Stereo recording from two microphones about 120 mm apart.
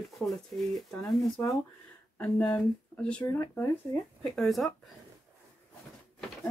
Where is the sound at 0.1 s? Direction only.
Centre (ahead or behind).